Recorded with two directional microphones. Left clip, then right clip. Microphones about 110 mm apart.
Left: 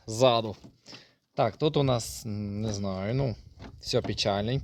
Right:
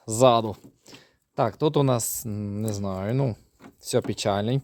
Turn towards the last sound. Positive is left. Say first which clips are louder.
# right 3 dB
turn(degrees=-40)  # may be behind; listen again after turning